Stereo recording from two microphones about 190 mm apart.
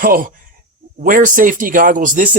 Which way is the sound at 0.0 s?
45° right (ahead or behind).